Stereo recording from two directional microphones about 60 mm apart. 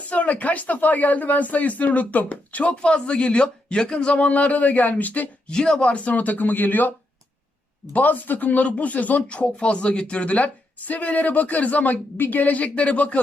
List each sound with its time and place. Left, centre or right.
0.1 s speech: left
5.5 s speech: centre; by 6.9 s left
7.9 s speech: left